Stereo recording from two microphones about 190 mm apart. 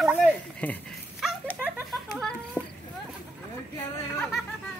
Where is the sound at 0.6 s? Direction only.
10° left (ahead or behind).